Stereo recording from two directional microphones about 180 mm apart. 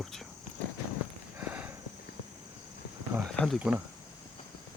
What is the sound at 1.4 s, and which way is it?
Horse, 10° right (ahead or behind).